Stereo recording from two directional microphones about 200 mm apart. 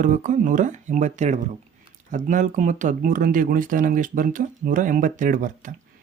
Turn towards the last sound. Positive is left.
turn(degrees=-40)  # may be behind; listen again after turning